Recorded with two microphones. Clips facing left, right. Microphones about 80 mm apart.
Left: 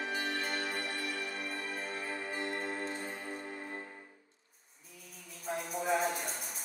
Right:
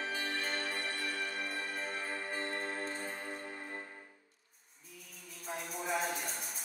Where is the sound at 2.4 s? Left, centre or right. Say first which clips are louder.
Left 3 dB; right.